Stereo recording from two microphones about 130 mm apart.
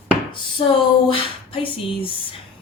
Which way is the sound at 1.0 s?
45° left (ahead or behind).